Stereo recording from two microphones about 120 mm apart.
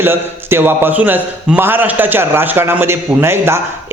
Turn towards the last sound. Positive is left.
turn(degrees=-20)  # may be behind; listen again after turning